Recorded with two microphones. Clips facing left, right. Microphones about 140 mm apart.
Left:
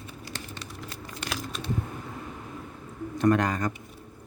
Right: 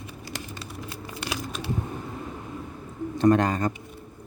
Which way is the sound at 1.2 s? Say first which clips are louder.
Right 2 dB; 5° right (ahead or behind).